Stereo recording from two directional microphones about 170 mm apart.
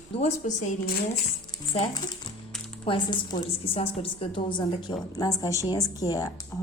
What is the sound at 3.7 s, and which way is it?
Speech, 35° left (ahead or behind).